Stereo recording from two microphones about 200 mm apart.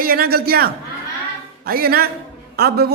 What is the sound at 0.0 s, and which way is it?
Speech, 50° right (ahead or behind).